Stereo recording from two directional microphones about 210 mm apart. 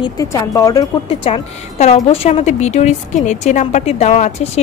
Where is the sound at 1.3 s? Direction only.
30° left (ahead or behind).